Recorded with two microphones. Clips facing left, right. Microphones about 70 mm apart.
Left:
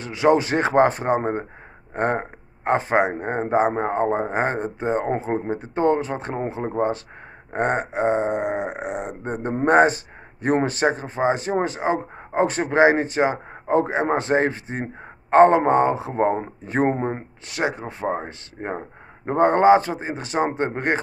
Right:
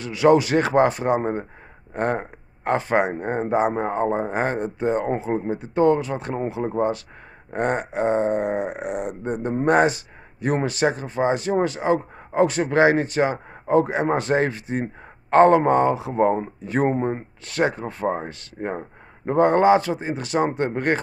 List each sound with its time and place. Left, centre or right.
0.0 s speech: left
17.5 s speech: centre